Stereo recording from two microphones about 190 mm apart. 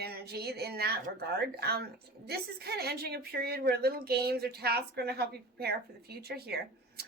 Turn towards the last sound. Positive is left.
turn(degrees=-55)  # may be behind; listen again after turning